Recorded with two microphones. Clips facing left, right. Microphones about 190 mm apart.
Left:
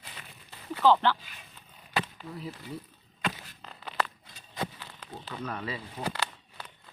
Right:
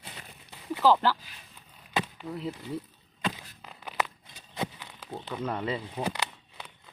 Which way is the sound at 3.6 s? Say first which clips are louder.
Even; 10° right (ahead or behind).